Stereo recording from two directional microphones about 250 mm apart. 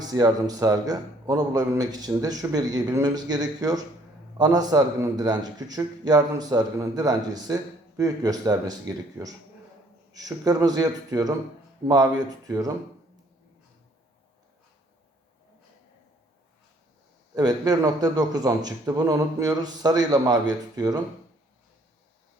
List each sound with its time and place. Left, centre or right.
0.0 s a man's voice: centre
17.3 s a man's voice: centre